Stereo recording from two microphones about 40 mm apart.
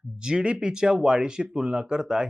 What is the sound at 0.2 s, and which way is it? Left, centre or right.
Speech, right.